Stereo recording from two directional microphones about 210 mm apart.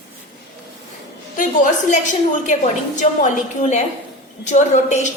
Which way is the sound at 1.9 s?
35° left (ahead or behind).